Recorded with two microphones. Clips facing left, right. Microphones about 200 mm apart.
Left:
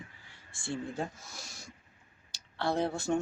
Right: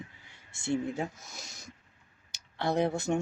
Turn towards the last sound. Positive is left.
turn(degrees=-20)  # may be behind; listen again after turning